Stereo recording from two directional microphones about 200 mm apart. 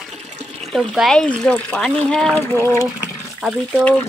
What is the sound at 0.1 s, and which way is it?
Water, 35° right (ahead or behind).